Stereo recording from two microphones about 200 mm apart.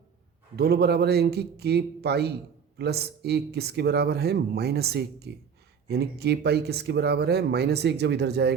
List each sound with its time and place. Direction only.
0.5 s speech: 55° right (ahead or behind)